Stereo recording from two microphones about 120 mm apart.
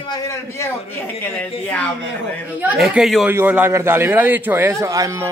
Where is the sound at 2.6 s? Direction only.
5° right (ahead or behind).